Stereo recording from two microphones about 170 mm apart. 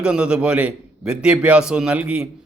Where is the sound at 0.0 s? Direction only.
5° right (ahead or behind).